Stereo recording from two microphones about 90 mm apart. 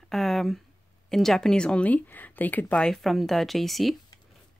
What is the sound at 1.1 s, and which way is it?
Speech, 5° left (ahead or behind).